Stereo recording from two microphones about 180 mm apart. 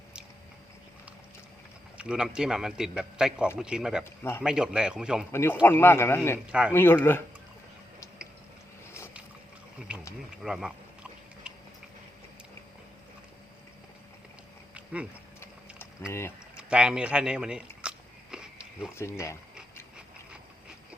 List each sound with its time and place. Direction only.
2.0 s a man's voice: 5° right (ahead or behind)
4.0 s a man's voice: 10° left (ahead or behind)
4.4 s a man's voice: 5° right (ahead or behind)
5.3 s a man's voice: 15° left (ahead or behind)
9.9 s insect: 5° right (ahead or behind)
10.4 s a sound: 5° right (ahead or behind)
15.4 s a sound: 15° left (ahead or behind)
16.6 s a man's voice: 5° right (ahead or behind)
17.8 s biting: 5° right (ahead or behind)
18.9 s a man's voice: 15° left (ahead or behind)